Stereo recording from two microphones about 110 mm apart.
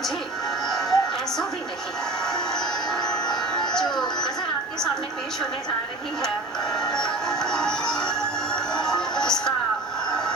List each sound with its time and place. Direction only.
0.7 s music: centre (ahead or behind)
2.2 s music: 5° left (ahead or behind)
6.9 s music: 5° left (ahead or behind)
10.1 s a sound: 5° left (ahead or behind)